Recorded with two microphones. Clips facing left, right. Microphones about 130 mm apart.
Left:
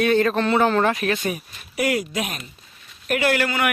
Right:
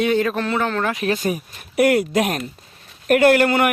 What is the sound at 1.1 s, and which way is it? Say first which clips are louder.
Speech: right 3 dB; 40° right (ahead or behind).